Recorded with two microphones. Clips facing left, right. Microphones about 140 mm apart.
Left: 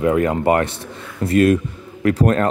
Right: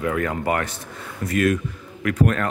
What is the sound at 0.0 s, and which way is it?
A man's voice, 25° left (ahead or behind).